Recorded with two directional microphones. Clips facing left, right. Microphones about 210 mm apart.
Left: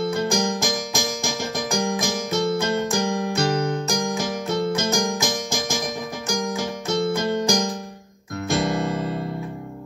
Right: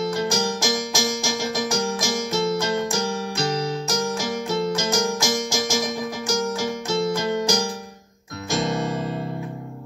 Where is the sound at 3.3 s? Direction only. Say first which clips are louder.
Left 2 dB; 55° left (ahead or behind).